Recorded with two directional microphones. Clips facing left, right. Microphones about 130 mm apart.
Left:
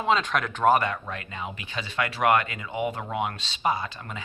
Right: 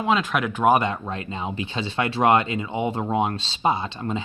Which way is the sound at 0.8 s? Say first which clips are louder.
Right 4 dB; 25° right (ahead or behind).